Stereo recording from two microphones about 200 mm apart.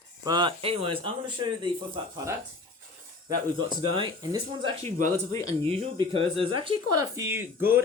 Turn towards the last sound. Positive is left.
turn(degrees=-10)  # may be behind; listen again after turning